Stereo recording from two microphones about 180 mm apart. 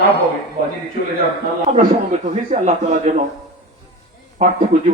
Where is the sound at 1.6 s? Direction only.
45° right (ahead or behind).